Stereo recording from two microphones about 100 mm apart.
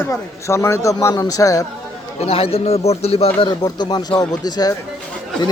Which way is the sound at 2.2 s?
85° left.